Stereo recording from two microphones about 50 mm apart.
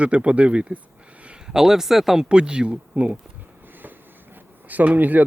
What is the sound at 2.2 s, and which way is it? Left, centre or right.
Speech, centre.